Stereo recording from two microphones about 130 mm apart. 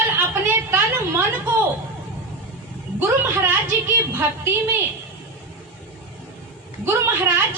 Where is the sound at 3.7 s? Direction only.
20° right (ahead or behind).